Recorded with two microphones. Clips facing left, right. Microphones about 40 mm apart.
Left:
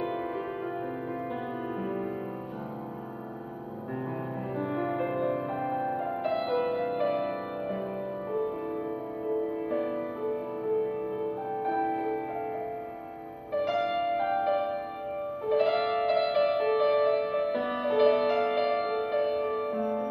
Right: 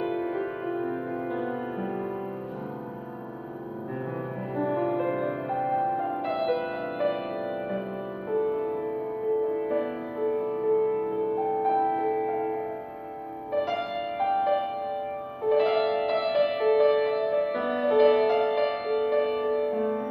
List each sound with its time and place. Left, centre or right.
0.0 s music: centre
4.6 s music: centre
19.2 s music: right
19.7 s music: centre